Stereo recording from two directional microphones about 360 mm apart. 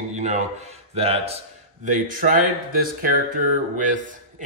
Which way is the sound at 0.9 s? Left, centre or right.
Centre.